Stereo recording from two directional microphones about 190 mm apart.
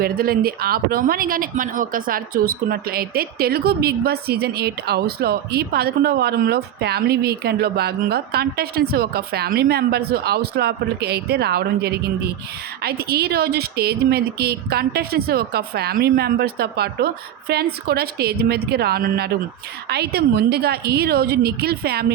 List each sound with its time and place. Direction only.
0.0 s speech: 50° right (ahead or behind)